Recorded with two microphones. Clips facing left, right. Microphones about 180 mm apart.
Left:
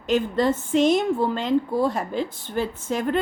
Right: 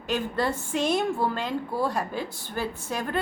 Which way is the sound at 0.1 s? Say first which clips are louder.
Left 6 dB; 20° left (ahead or behind).